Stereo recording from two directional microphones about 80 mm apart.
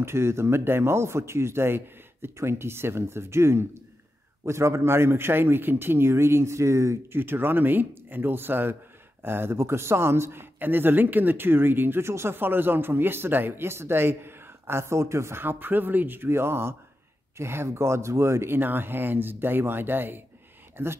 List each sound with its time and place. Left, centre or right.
0.0 s a man's voice: right